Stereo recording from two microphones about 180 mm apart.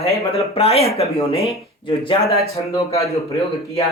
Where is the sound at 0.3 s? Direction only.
35° left (ahead or behind).